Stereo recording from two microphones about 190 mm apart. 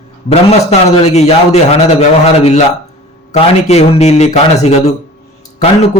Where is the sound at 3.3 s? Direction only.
35° left (ahead or behind).